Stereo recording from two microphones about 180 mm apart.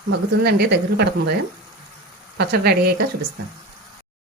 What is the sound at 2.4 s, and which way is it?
Speech, 65° right (ahead or behind).